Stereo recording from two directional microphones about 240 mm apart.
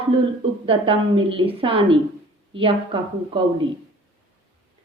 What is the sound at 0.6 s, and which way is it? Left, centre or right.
A woman's voice, right.